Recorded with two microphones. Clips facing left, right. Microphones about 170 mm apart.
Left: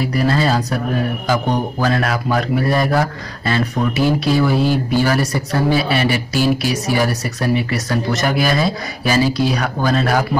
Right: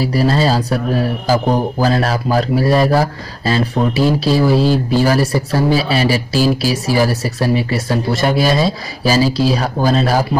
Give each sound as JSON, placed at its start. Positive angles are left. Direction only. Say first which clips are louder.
{"t": 0.0, "sound": "a man's voice", "louder": "right 2 dB", "side_deg": -30}